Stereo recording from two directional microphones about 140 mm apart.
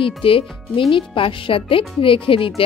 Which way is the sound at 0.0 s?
40° left (ahead or behind).